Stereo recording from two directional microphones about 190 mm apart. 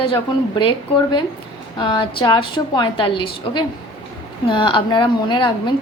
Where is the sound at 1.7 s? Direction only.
25° left (ahead or behind).